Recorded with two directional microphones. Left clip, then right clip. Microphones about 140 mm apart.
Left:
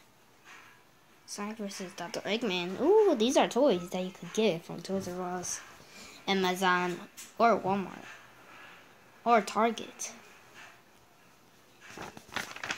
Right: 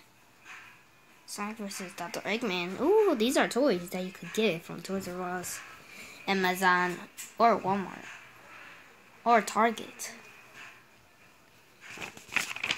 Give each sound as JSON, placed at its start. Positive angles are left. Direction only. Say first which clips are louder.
{"t": 1.3, "sound": "a woman's voice", "louder": "right 1 dB", "side_deg": 0}
{"t": 6.2, "sound": "a woman's voice", "louder": "right 2 dB", "side_deg": -5}
{"t": 9.2, "sound": "speech", "louder": "right 1 dB", "side_deg": -5}